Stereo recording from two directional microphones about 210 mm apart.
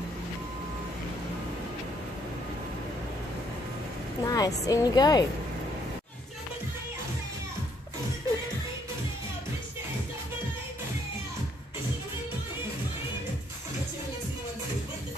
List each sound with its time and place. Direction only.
4.2 s a woman's voice: 15° left (ahead or behind)